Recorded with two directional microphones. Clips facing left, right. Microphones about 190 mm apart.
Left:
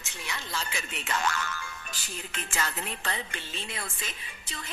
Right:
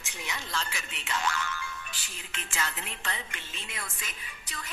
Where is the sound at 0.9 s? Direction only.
50° left (ahead or behind).